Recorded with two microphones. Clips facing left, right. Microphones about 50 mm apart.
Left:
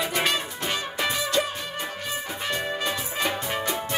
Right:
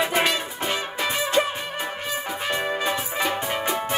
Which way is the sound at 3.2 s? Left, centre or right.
Centre.